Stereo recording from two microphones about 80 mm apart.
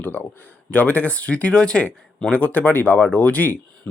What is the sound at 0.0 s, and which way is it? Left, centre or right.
Speech, left.